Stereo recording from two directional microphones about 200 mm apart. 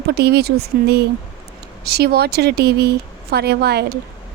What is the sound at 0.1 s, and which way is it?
Speech, 55° right (ahead or behind).